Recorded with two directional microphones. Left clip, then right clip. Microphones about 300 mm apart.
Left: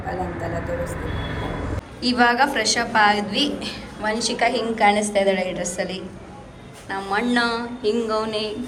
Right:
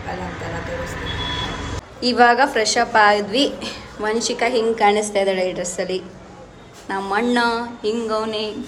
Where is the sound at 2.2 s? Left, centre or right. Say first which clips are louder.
Right 4 dB; centre.